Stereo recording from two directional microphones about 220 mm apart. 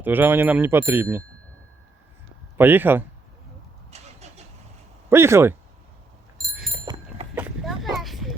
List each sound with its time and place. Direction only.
0.0 s speech: 10° right (ahead or behind)
2.6 s speech: 10° right (ahead or behind)
3.9 s vehicle: 30° right (ahead or behind)
5.0 s speech: 10° right (ahead or behind)
6.4 s bicycle: centre (ahead or behind)
7.3 s a sound: 5° right (ahead or behind)
7.9 s children playing: centre (ahead or behind)